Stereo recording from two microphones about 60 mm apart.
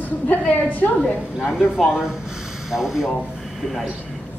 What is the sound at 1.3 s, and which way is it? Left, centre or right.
Speech, centre.